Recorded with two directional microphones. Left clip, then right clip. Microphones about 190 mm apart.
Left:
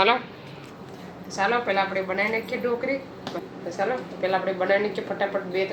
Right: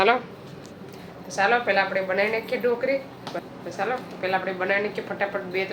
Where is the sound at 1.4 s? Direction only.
Centre (ahead or behind).